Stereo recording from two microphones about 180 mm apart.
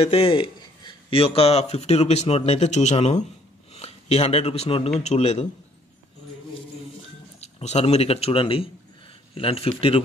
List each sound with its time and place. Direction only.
0.0 s a man's voice: 30° left (ahead or behind)
7.3 s a man's voice: 35° left (ahead or behind)